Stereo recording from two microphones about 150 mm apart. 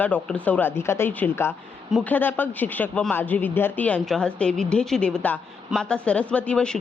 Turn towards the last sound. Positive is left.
turn(degrees=5)  # may be behind; listen again after turning